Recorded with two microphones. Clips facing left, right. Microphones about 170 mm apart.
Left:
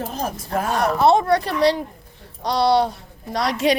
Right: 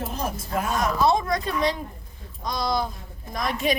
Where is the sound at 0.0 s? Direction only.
40° left (ahead or behind).